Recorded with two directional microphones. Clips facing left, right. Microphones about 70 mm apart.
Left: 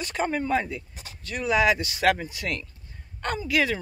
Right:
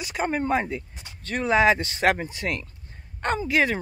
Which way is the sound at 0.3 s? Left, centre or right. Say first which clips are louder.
Right 4 dB; right.